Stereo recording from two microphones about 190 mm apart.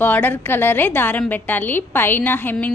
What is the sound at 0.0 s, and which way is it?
A woman's voice, 10° left (ahead or behind).